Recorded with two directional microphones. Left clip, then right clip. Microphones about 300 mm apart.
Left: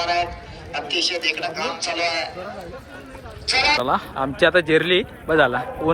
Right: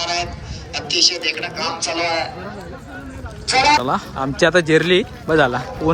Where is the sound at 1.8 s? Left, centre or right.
Centre.